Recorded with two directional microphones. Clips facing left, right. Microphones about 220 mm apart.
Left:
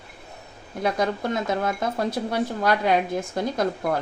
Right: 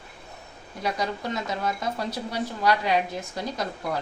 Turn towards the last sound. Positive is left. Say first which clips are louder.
# left 6 dB
turn(degrees=50)  # may be behind; listen again after turning